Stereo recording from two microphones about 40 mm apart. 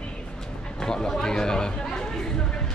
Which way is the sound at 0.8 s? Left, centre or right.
Centre.